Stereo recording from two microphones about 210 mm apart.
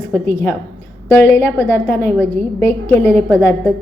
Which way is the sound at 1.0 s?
10° left (ahead or behind).